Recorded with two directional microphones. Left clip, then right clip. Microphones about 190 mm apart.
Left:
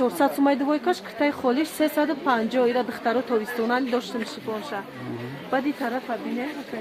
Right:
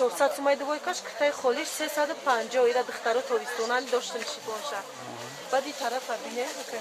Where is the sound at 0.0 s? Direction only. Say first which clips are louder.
Left 3 dB; 40° left (ahead or behind).